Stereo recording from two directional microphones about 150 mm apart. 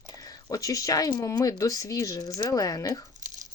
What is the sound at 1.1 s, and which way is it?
Speech, 20° left (ahead or behind).